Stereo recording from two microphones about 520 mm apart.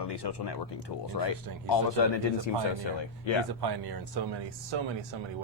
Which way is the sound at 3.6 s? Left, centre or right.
Right.